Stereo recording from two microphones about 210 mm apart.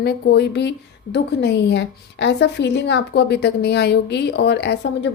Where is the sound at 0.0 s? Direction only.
50° left (ahead or behind).